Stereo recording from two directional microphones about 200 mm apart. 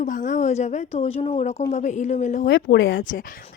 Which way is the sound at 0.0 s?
40° left (ahead or behind).